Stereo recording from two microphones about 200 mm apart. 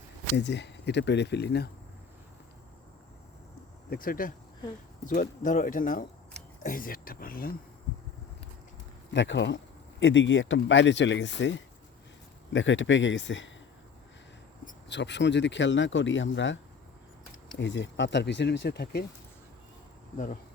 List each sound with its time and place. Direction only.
0.3 s speech: 60° left (ahead or behind)
3.8 s speech: 45° left (ahead or behind)
9.1 s speech: 60° left (ahead or behind)
14.8 s speech: 60° left (ahead or behind)
17.6 s speech: 65° left (ahead or behind)
20.1 s insect: 40° left (ahead or behind)